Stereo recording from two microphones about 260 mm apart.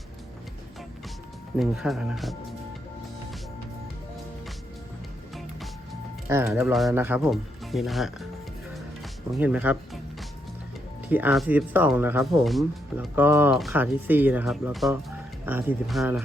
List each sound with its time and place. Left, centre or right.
1.5 s speech: centre
6.2 s speech: centre
9.3 s speech: centre
11.1 s speech: centre